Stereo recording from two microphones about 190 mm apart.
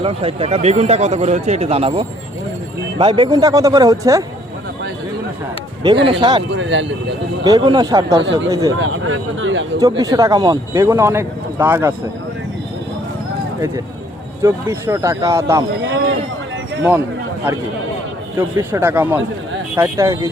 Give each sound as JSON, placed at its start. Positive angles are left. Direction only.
{"t": 0.0, "sound": "a man's voice", "side_deg": -30}
{"t": 6.1, "sound": "a man's voice", "side_deg": -25}
{"t": 6.5, "sound": "speech", "side_deg": -75}
{"t": 7.4, "sound": "a man's voice", "side_deg": -20}
{"t": 8.8, "sound": "speech", "side_deg": -90}
{"t": 10.0, "sound": "a man's voice", "side_deg": -20}
{"t": 14.4, "sound": "a man's voice", "side_deg": -15}
{"t": 18.3, "sound": "a man's voice", "side_deg": -15}